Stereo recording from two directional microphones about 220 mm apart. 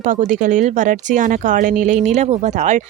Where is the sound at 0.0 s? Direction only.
35° right (ahead or behind).